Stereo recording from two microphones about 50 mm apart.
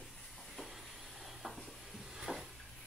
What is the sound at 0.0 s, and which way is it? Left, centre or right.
Hiss, centre.